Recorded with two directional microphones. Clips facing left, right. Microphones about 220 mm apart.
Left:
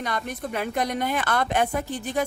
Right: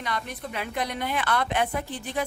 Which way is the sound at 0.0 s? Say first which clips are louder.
Left 3 dB; 45° left (ahead or behind).